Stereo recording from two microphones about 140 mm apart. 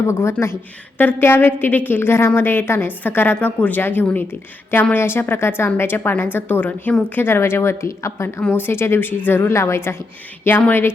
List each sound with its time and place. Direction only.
0.1 s a woman's voice: 20° left (ahead or behind)